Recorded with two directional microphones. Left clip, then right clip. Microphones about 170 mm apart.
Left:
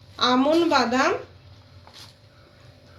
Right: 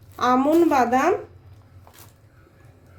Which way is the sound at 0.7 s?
55° right (ahead or behind).